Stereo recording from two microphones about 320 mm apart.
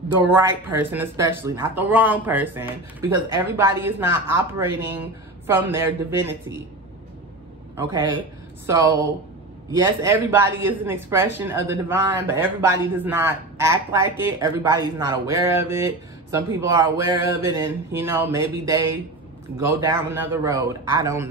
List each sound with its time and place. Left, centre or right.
0.2 s speech: centre
7.7 s a man's voice: centre
10.0 s speech: centre